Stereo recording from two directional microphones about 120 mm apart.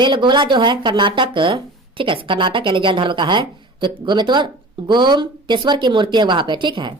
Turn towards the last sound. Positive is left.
turn(degrees=-40)  # may be behind; listen again after turning